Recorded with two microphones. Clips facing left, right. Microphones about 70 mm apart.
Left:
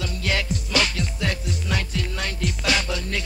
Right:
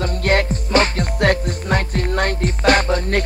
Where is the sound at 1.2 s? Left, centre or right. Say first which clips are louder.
Right 13 dB; right.